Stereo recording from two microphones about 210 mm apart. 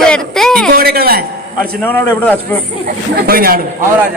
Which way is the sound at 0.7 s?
45° right (ahead or behind).